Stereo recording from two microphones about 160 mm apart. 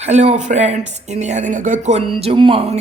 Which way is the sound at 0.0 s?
45° right (ahead or behind).